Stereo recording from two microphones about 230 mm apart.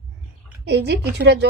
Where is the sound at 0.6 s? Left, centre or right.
Right.